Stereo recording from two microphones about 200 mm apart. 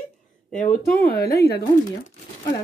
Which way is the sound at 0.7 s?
50° left (ahead or behind).